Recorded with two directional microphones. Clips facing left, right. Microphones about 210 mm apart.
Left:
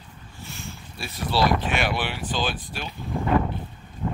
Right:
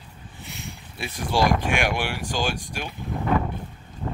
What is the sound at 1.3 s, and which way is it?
Speech, 15° right (ahead or behind).